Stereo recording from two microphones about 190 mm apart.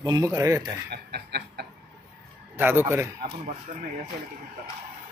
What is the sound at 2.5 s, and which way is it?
Speech, 10° right (ahead or behind).